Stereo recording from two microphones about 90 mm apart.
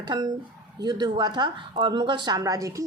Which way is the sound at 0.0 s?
55° right (ahead or behind).